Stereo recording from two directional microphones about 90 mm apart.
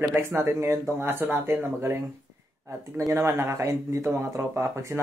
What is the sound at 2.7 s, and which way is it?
Speech, 35° right (ahead or behind).